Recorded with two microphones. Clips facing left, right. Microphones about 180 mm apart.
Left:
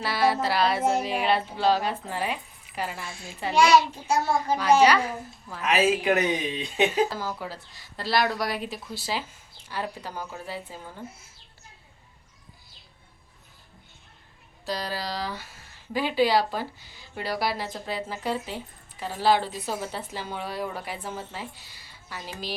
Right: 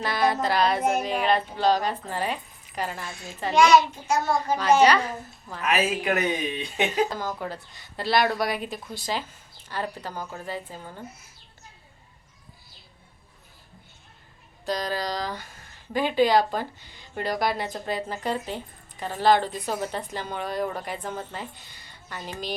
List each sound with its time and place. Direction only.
0.0 s speech: 5° left (ahead or behind)
5.6 s speech: 20° left (ahead or behind)
7.1 s speech: 5° left (ahead or behind)
14.7 s speech: 5° left (ahead or behind)